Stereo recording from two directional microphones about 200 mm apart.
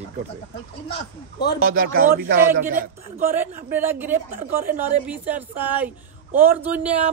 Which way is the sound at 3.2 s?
10° right (ahead or behind).